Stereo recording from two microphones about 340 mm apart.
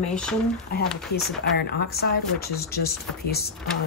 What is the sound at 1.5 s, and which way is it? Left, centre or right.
Speech, left.